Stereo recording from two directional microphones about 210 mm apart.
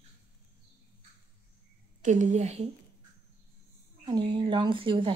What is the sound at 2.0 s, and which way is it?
Speech, 35° right (ahead or behind).